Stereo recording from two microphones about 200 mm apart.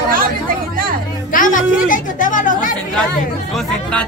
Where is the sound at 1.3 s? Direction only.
40° left (ahead or behind).